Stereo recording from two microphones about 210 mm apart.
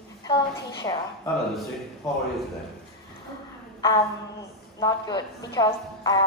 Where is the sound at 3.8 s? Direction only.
15° left (ahead or behind).